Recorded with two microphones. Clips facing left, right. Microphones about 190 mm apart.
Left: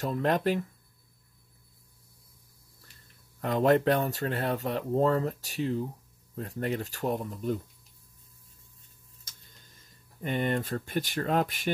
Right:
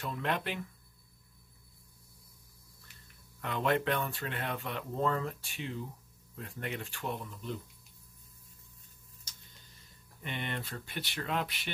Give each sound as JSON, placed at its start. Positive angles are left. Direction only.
{"t": 0.0, "sound": "speech", "side_deg": 40}
{"t": 3.3, "sound": "speech", "side_deg": 40}
{"t": 10.2, "sound": "speech", "side_deg": 40}